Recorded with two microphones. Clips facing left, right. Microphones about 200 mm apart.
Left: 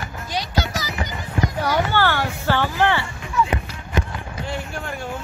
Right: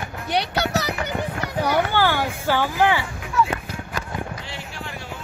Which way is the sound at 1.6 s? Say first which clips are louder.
Right 2 dB; 10° right (ahead or behind).